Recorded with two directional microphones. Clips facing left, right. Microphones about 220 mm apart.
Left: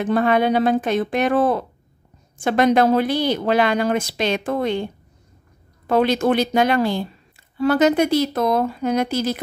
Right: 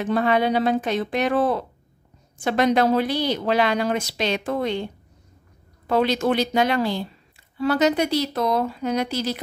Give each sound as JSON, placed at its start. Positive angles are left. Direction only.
{"t": 0.0, "sound": "a woman's voice", "side_deg": 50}
{"t": 5.9, "sound": "a woman's voice", "side_deg": 50}